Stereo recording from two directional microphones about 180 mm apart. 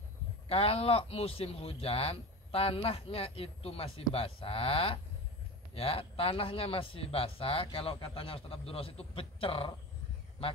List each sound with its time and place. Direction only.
0.5 s speech: 30° left (ahead or behind)